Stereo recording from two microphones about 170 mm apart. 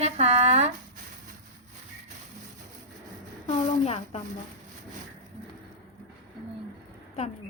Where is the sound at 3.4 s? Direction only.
40° left (ahead or behind).